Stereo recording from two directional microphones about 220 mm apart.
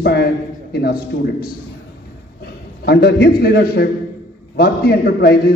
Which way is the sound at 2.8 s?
45° left (ahead or behind).